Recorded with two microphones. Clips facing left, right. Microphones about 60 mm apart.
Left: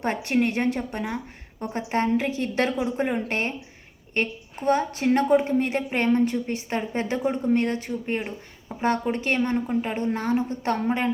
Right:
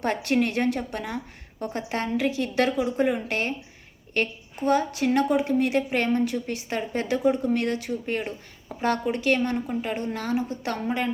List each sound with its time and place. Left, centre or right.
0.0 s a woman's voice: left
9.0 s a woman's voice: left